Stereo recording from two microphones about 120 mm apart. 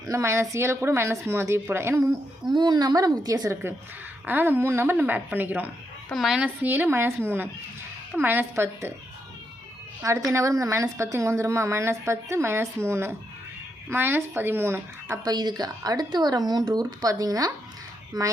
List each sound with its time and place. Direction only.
0.1 s a woman's voice: 25° right (ahead or behind)
2.5 s speech: 35° right (ahead or behind)
4.3 s a woman's voice: 15° right (ahead or behind)
6.1 s a woman's voice: centre (ahead or behind); by 8.9 s 20° right (ahead or behind)
10.0 s a woman's voice: 25° right (ahead or behind)
15.2 s speech: 35° right (ahead or behind)